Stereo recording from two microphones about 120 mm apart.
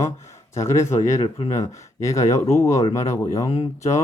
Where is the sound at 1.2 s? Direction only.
60° left (ahead or behind).